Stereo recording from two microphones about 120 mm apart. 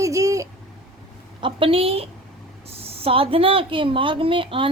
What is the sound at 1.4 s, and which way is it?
A woman's voice, 45° right (ahead or behind).